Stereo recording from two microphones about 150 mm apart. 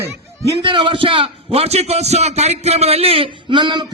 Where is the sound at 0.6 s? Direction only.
35° right (ahead or behind).